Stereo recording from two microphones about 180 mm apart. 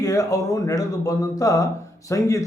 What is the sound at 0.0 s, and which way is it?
Speech, 20° left (ahead or behind).